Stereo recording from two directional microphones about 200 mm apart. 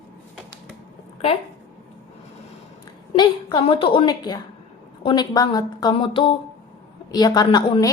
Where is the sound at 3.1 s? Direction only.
25° left (ahead or behind).